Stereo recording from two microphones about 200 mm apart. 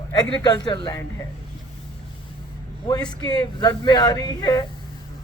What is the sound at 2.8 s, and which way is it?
Speech, 20° left (ahead or behind).